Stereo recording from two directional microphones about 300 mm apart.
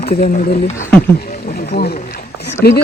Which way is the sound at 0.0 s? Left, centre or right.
Left.